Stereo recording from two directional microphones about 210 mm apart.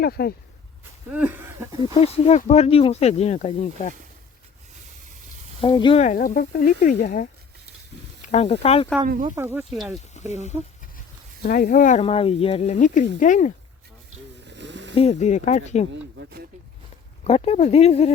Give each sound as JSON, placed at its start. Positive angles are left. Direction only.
{"t": 0.0, "sound": "speech", "side_deg": 50}
{"t": 1.1, "sound": "a sound", "side_deg": -10}
{"t": 1.9, "sound": "speech", "side_deg": 30}
{"t": 5.5, "sound": "speech", "side_deg": 25}
{"t": 6.0, "sound": "speech", "side_deg": 40}
{"t": 9.0, "sound": "speech", "side_deg": -40}
{"t": 9.3, "sound": "a sound", "side_deg": -10}
{"t": 9.6, "sound": "speech", "side_deg": 0}
{"t": 10.2, "sound": "speech", "side_deg": 35}
{"t": 11.4, "sound": "speech", "side_deg": 45}
{"t": 14.4, "sound": "a sound", "side_deg": -55}
{"t": 14.9, "sound": "speech", "side_deg": 30}
{"t": 16.1, "sound": "a sound", "side_deg": -50}
{"t": 17.2, "sound": "speech", "side_deg": 30}